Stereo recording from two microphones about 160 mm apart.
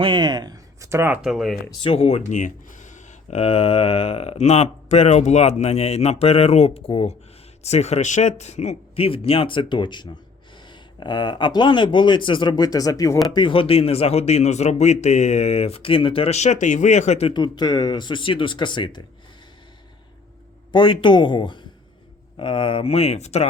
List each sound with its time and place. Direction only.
0.0 s speech: 30° right (ahead or behind)
1.2 s speech: centre (ahead or behind)
1.8 s speech: 35° left (ahead or behind); by 13.1 s 20° left (ahead or behind)
13.3 s a man's voice: 30° left (ahead or behind)
17.3 s speech: 25° left (ahead or behind)
20.7 s speech: 30° left (ahead or behind)